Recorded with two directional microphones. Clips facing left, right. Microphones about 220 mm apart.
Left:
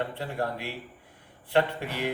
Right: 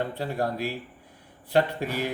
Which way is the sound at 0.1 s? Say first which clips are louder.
Right 3 dB; 40° right (ahead or behind).